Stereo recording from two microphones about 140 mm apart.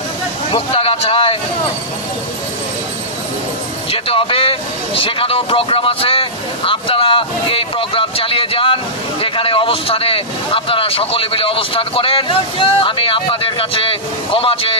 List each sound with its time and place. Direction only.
0.5 s speech: 45° left (ahead or behind)
3.9 s vehicle: 40° left (ahead or behind)
9.2 s speech: 40° left (ahead or behind)